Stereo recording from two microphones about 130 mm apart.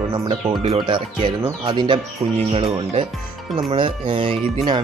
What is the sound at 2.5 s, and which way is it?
Speech, 50° right (ahead or behind).